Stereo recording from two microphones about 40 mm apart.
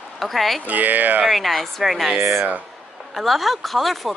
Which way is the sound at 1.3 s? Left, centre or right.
Centre.